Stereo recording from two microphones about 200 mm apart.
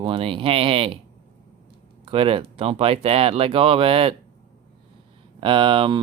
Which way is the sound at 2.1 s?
25° right (ahead or behind).